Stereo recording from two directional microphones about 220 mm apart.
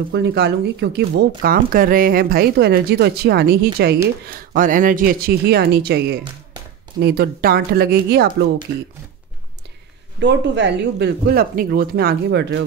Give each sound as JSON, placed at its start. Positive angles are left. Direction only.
{"t": 0.1, "sound": "speech", "side_deg": -50}
{"t": 10.2, "sound": "speech", "side_deg": -50}